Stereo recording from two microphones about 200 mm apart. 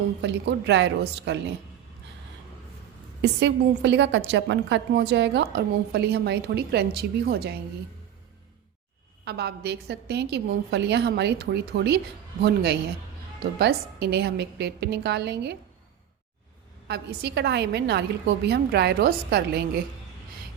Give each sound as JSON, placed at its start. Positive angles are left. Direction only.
{"t": 0.2, "sound": "a woman's voice", "side_deg": -60}
{"t": 3.2, "sound": "a woman's voice", "side_deg": -60}
{"t": 9.2, "sound": "a woman's voice", "side_deg": -55}
{"t": 16.9, "sound": "a woman's voice", "side_deg": -55}